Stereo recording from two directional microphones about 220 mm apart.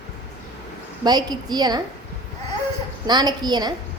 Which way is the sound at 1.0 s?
20° right (ahead or behind).